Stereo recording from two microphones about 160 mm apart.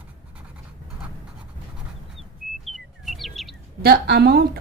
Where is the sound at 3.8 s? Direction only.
80° right.